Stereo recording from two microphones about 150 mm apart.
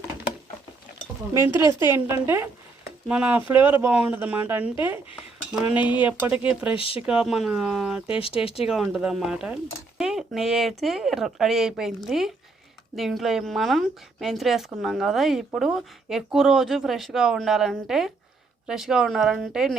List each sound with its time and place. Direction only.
1.3 s speech: 15° right (ahead or behind)
6.7 s speech: 35° left (ahead or behind)
7.1 s speech: 5° right (ahead or behind)